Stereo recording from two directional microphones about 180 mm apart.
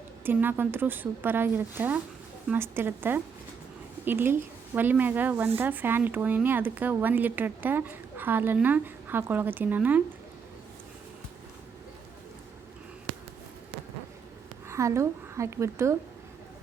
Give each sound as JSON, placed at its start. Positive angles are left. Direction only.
{"t": 0.3, "sound": "speech", "side_deg": -10}
{"t": 14.7, "sound": "a woman's voice", "side_deg": -15}